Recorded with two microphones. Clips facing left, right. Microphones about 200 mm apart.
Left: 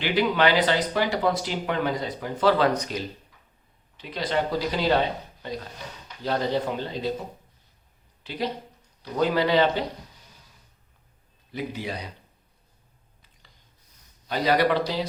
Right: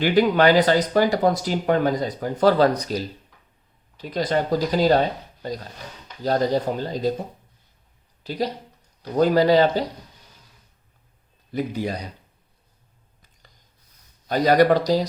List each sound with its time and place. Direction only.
0.0 s speech: 45° right (ahead or behind)
8.2 s speech: 40° right (ahead or behind)
11.5 s speech: 45° right (ahead or behind)
14.3 s speech: 45° right (ahead or behind)